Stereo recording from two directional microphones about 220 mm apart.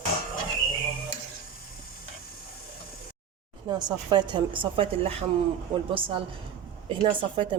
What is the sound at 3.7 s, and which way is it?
A woman's voice, 20° right (ahead or behind).